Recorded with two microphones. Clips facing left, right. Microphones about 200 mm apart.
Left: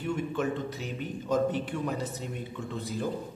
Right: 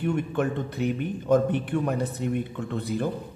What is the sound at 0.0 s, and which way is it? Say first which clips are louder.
A man's voice: right 4 dB; 55° right (ahead or behind).